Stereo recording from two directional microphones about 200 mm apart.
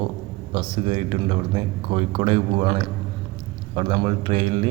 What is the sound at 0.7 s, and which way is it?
Speech, 25° right (ahead or behind).